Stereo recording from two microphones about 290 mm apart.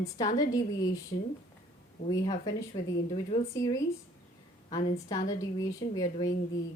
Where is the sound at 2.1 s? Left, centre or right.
Centre.